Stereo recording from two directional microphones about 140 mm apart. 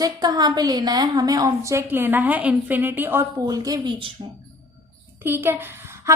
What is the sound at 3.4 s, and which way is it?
Speech, 25° right (ahead or behind).